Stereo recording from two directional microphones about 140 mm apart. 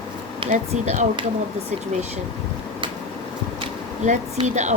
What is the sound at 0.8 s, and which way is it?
Speech, 55° right (ahead or behind).